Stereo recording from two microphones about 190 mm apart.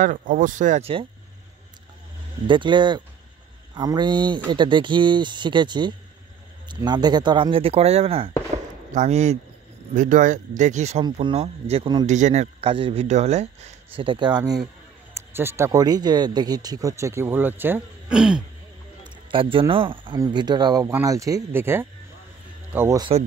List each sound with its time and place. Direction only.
0.0 s speech: 45° right (ahead or behind)
2.4 s speech: 25° right (ahead or behind)
12.1 s speech: 40° right (ahead or behind); by 18.4 s 5° right (ahead or behind)
19.3 s speech: 25° right (ahead or behind)